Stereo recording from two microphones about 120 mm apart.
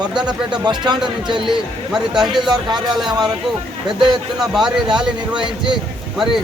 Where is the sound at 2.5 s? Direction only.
35° right (ahead or behind).